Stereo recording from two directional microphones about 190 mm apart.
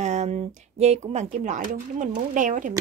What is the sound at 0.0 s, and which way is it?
A woman's voice, 35° right (ahead or behind).